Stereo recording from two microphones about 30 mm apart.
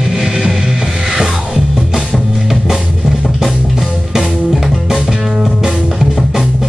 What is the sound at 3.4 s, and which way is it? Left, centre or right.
Music, centre.